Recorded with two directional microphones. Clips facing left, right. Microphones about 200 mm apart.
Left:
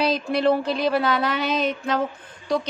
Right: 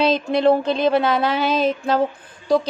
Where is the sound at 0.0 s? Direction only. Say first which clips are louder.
Right 4 dB; 25° right (ahead or behind).